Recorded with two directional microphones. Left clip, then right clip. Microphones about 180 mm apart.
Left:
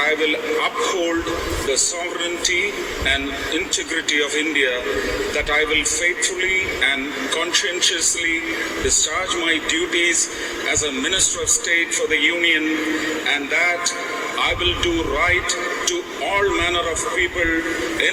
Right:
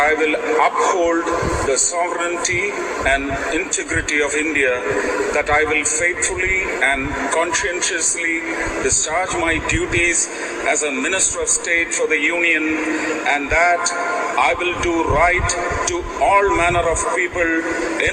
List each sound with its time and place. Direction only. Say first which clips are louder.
0.0 s speech: right 3 dB; 15° left (ahead or behind)
4.1 s speech: right 1 dB; 15° left (ahead or behind)